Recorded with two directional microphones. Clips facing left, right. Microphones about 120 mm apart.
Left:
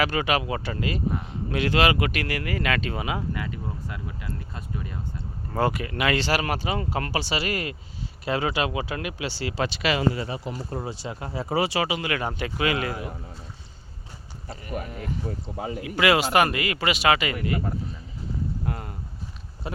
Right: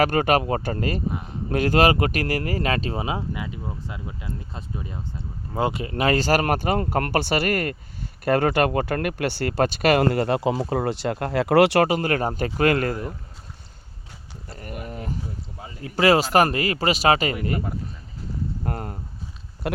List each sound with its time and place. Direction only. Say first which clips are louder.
0.0 s speech: right 5 dB; 45° right (ahead or behind)
14.6 s speech: even; 45° right (ahead or behind)
18.6 s speech: right 2 dB; 50° right (ahead or behind)
19.6 s speech: right 7 dB; 70° right (ahead or behind)